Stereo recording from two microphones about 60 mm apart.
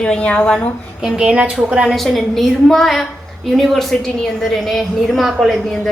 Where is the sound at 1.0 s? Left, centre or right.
Centre.